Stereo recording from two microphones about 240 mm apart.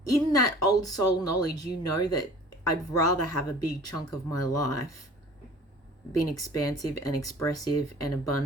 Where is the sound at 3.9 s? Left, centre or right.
Centre.